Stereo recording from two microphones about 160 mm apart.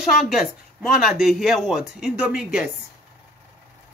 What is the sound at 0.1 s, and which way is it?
Speech, centre (ahead or behind).